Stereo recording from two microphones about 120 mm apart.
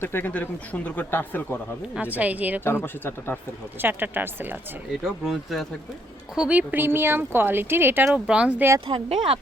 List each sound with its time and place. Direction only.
0.0 s speech: 15° left (ahead or behind)
2.0 s speech: 10° right (ahead or behind)
2.6 s speech: 20° left (ahead or behind)
3.8 s speech: 15° right (ahead or behind)
4.9 s speech: 5° right (ahead or behind)
8.9 s speech: 50° right (ahead or behind)